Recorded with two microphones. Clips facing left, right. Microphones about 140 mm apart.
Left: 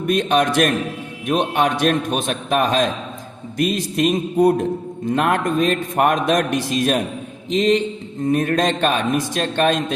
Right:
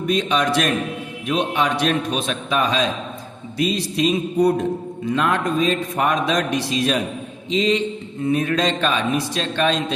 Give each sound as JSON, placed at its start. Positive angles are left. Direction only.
{"t": 0.1, "sound": "a man's voice", "side_deg": 50}